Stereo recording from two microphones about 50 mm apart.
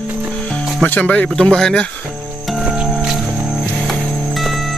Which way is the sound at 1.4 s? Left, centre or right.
Centre.